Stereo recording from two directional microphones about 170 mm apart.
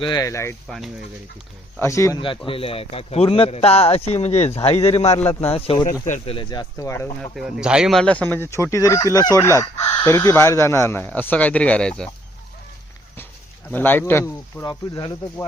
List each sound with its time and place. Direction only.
0.0 s speech: 20° left (ahead or behind)
0.7 s speech: centre (ahead or behind)
1.8 s speech: 15° left (ahead or behind)
2.5 s speech: 35° left (ahead or behind)
5.7 s speech: 20° left (ahead or behind)
6.1 s speech: 35° left (ahead or behind); by 7.2 s 15° left (ahead or behind)
7.2 s speech: centre (ahead or behind)
13.7 s speech: 10° left (ahead or behind)